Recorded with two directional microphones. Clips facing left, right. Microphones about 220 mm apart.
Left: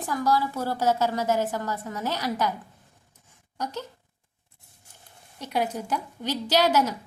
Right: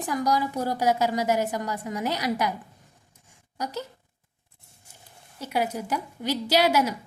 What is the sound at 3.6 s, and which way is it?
Speech, 10° right (ahead or behind).